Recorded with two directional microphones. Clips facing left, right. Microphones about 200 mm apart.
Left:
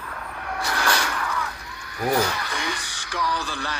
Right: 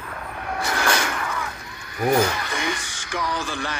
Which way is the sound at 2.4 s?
25° right (ahead or behind).